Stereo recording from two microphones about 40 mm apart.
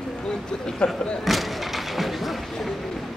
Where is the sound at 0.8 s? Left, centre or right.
Centre.